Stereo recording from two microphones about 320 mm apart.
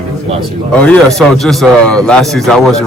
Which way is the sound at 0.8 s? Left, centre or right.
Centre.